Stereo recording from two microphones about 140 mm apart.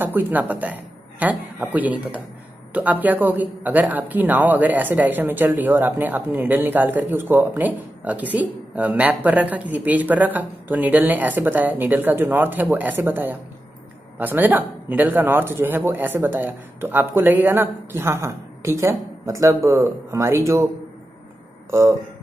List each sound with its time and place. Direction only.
0.0 s speech: 15° right (ahead or behind)
21.6 s speech: 20° right (ahead or behind)